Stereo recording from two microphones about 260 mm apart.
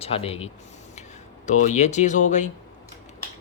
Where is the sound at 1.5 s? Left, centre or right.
Left.